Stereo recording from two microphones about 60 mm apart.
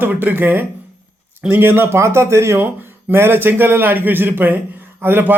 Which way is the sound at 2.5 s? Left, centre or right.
Right.